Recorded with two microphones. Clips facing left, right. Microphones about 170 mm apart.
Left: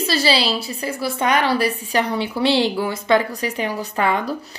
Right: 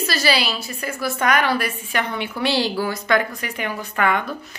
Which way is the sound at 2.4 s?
25° left (ahead or behind).